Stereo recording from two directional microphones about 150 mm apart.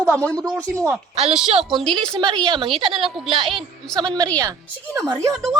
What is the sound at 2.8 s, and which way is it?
Speech, 35° right (ahead or behind).